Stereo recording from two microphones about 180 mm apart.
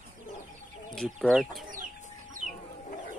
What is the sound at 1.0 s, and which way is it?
Chicken, centre (ahead or behind).